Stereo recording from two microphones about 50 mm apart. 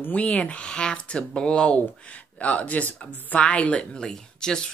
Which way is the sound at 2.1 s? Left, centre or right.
Left.